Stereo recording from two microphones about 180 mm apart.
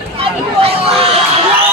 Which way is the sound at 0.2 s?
35° right (ahead or behind).